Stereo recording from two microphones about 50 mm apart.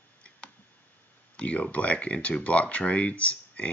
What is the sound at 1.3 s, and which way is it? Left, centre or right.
Speech, left.